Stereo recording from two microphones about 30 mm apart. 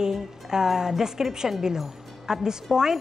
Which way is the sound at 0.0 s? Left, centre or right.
Centre.